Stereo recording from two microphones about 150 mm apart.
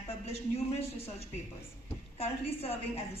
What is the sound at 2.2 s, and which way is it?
Speech, 40° left (ahead or behind).